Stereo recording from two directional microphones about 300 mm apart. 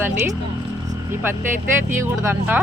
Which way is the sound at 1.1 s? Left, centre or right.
Centre.